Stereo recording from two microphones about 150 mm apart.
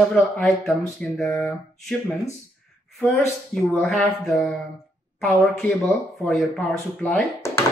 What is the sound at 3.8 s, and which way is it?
Speech, centre (ahead or behind).